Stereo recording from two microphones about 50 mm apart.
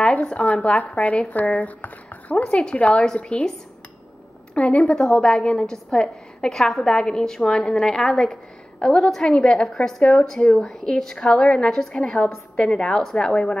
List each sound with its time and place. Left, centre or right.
0.0 s speech: left
4.6 s a woman's voice: left